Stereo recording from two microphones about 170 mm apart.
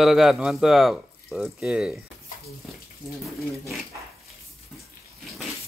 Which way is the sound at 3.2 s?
Centre (ahead or behind).